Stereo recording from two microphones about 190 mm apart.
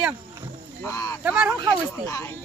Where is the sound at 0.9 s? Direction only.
15° left (ahead or behind).